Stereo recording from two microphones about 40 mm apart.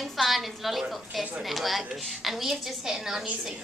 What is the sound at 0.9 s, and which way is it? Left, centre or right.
A woman's voice, centre.